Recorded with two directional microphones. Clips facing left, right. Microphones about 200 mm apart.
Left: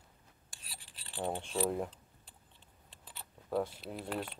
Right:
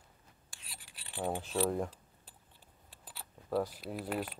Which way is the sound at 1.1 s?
10° right (ahead or behind).